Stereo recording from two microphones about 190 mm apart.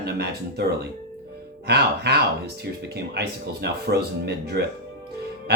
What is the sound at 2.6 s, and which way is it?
Speech, 60° right (ahead or behind).